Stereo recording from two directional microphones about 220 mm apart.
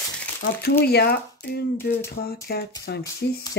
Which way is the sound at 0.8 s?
45° left (ahead or behind).